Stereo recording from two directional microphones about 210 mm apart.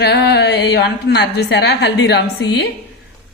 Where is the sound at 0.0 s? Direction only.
50° left (ahead or behind).